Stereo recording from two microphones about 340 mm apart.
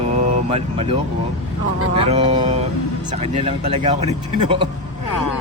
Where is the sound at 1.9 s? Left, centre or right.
Centre.